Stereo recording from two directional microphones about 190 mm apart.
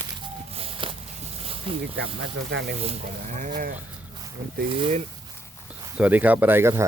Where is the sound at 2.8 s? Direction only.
35° right (ahead or behind).